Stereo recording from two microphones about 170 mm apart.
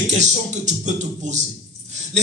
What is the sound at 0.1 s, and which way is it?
Music, 45° right (ahead or behind).